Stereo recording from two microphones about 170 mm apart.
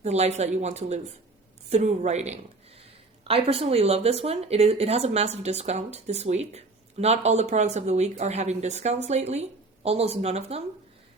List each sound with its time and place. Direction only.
0.0 s speech: 40° right (ahead or behind)